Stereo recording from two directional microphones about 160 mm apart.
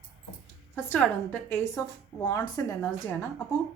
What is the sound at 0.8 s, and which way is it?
A woman's voice, 10° left (ahead or behind).